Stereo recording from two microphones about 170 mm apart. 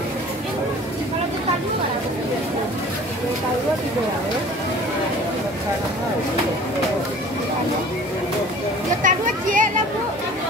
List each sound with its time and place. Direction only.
9.0 s speech: 50° right (ahead or behind)